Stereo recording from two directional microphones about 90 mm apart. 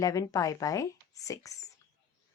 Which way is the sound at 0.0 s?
40° left (ahead or behind).